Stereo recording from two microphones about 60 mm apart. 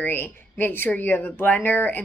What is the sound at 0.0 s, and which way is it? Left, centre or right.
Speech, left.